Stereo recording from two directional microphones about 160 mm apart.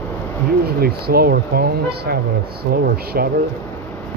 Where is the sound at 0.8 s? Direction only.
70° right (ahead or behind).